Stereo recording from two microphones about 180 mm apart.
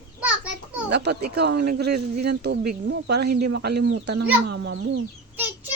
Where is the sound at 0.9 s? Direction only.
65° right (ahead or behind).